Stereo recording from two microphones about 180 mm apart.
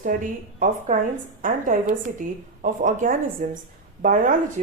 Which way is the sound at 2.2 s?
50° right (ahead or behind).